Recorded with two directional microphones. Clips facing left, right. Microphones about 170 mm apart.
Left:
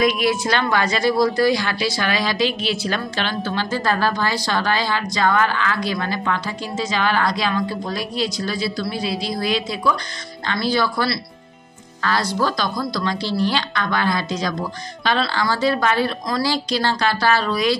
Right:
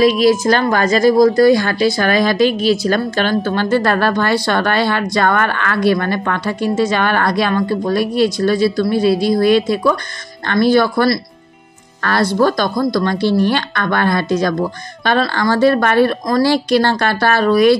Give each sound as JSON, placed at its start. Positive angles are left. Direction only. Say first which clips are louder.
{"t": 0.0, "sound": "a woman's voice", "louder": "right 7 dB", "side_deg": -35}